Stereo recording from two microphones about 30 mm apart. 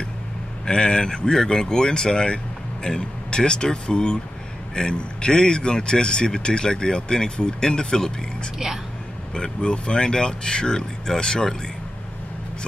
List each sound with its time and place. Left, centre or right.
0.7 s speech: left
9.3 s speech: left